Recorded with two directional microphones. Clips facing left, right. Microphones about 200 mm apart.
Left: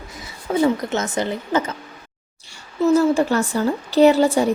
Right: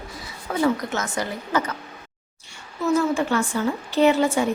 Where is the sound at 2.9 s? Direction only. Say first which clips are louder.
Left 4 dB; 35° left (ahead or behind).